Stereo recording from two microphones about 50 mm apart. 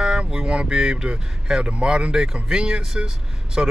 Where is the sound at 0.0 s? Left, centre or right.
Centre.